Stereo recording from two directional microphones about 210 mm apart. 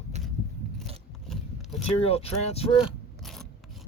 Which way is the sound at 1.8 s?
30° left (ahead or behind).